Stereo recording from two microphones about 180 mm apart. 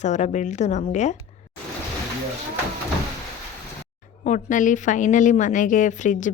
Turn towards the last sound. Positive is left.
turn(degrees=45)  # may be behind; listen again after turning